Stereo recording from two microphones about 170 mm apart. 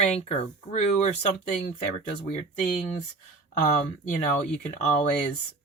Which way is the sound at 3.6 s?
45° left (ahead or behind).